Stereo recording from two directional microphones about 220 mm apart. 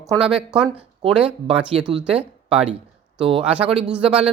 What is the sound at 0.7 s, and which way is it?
Speech, 25° right (ahead or behind).